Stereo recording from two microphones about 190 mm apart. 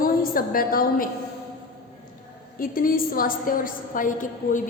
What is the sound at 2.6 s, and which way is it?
A woman's voice, 50° left (ahead or behind).